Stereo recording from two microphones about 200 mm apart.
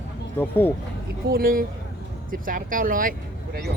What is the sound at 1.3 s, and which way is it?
Speech, 45° right (ahead or behind).